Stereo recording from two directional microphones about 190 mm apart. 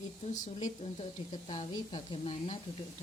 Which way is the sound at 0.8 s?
35° left (ahead or behind).